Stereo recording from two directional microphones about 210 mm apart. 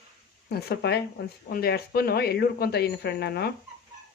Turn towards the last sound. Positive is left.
turn(degrees=50)  # may be behind; listen again after turning